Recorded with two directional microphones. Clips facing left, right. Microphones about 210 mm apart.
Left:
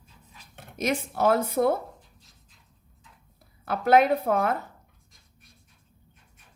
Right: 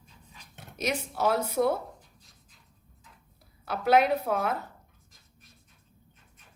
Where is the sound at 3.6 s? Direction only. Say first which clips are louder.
Left 3 dB; 50° left (ahead or behind).